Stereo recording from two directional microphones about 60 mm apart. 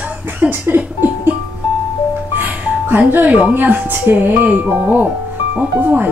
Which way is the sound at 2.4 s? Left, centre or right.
Right.